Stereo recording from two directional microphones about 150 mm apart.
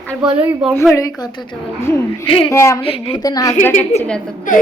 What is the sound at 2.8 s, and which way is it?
Speech, 40° left (ahead or behind).